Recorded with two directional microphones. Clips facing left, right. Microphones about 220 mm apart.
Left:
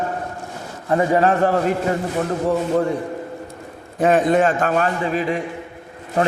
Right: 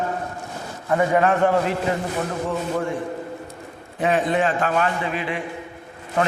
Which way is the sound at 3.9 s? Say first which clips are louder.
Left 5 dB; 45° left (ahead or behind).